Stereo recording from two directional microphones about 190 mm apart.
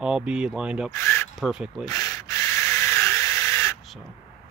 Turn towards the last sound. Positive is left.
turn(degrees=15)  # may be behind; listen again after turning